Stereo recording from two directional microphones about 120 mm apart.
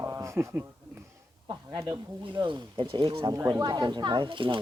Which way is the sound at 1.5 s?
35° right (ahead or behind).